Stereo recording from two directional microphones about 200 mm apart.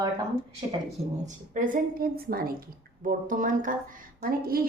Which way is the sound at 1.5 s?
40° right (ahead or behind).